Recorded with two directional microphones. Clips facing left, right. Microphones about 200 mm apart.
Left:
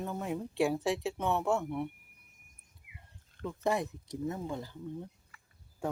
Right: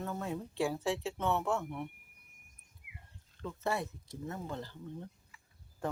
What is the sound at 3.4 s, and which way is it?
Speech, 15° left (ahead or behind).